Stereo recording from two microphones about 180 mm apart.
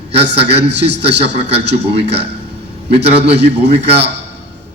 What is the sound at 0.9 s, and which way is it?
Speech, 70° right (ahead or behind).